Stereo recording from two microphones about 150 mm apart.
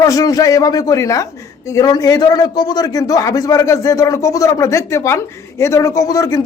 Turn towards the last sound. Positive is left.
turn(degrees=25)  # may be behind; listen again after turning